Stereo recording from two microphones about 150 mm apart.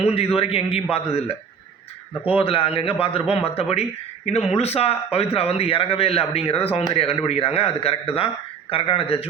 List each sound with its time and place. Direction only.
0.0 s a man's voice: 40° left (ahead or behind)
2.4 s a man's voice: 40° left (ahead or behind)